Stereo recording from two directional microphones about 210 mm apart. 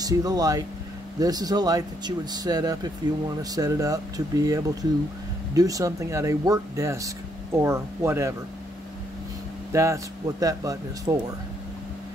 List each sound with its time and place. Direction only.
0.0 s speech: 15° right (ahead or behind)
9.7 s speech: 15° right (ahead or behind)